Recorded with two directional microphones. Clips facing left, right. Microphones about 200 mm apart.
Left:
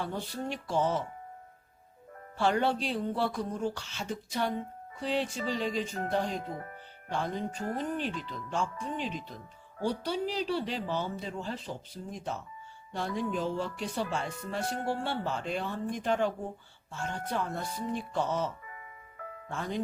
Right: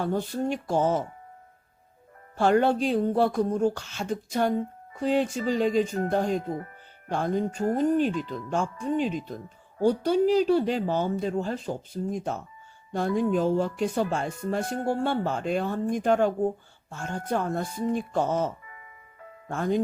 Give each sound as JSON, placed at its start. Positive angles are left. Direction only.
{"t": 0.0, "sound": "speech", "side_deg": -45}
{"t": 2.3, "sound": "speech", "side_deg": -50}